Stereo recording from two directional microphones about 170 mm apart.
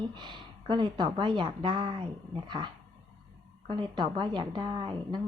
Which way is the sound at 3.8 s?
25° right (ahead or behind).